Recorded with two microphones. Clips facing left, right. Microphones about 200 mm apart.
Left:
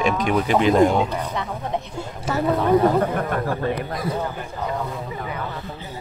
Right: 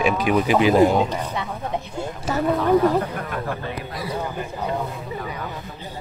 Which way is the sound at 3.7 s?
50° left (ahead or behind).